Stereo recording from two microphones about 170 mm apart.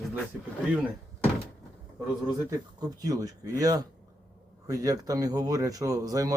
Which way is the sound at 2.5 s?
20° right (ahead or behind).